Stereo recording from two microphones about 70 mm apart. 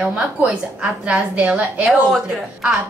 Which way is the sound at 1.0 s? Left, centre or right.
Centre.